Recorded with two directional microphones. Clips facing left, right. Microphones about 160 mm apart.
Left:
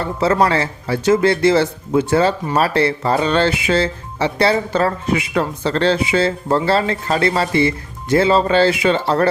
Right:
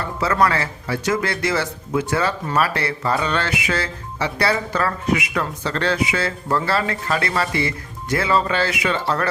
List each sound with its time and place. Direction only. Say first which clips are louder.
0.0 s speech: left 4 dB; 30° left (ahead or behind)